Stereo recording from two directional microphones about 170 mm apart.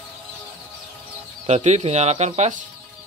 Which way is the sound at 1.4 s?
40° right (ahead or behind).